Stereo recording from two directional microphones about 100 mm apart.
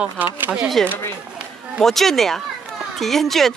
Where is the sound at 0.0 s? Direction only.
15° right (ahead or behind).